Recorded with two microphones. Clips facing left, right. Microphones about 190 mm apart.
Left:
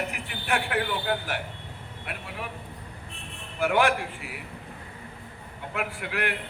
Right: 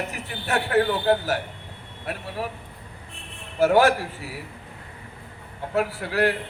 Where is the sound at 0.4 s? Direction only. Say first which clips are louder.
Right 6 dB; 40° right (ahead or behind).